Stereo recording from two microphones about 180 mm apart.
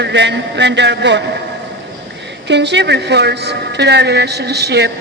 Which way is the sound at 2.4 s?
75° right (ahead or behind).